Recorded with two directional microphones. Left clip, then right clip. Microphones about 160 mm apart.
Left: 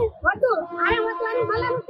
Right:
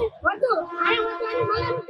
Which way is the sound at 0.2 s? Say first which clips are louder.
Even; 10° left (ahead or behind).